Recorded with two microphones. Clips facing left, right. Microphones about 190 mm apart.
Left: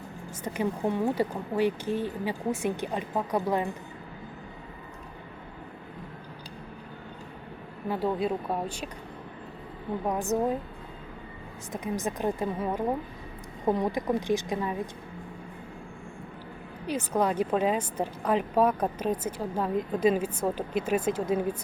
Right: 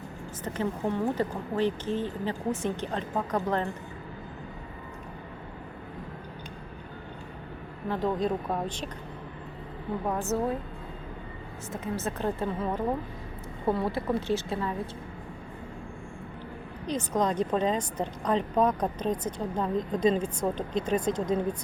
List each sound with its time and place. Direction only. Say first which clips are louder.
0.4 s a woman's voice: left 1 dB; 10° left (ahead or behind)
7.9 s a woman's voice: even; 10° left (ahead or behind)
10.1 s a woman's voice: left 2 dB; 15° left (ahead or behind)
11.7 s a woman's voice: left 1 dB; 15° left (ahead or behind)
16.8 s a woman's voice: left 1 dB; 10° left (ahead or behind)